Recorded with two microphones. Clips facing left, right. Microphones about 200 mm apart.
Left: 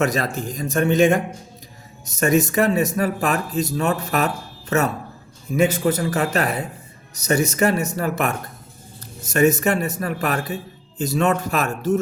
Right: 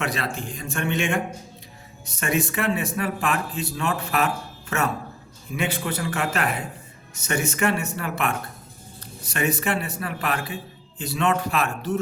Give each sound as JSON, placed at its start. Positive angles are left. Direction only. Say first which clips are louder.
{"t": 0.0, "sound": "speech", "louder": "left 6 dB", "side_deg": 40}
{"t": 5.5, "sound": "a man's voice", "louder": "left 9 dB", "side_deg": 40}